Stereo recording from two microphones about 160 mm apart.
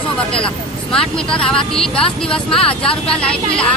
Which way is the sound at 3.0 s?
5° left (ahead or behind).